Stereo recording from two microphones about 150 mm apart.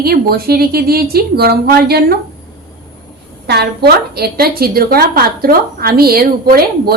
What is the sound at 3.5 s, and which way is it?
A woman's voice, 90° right.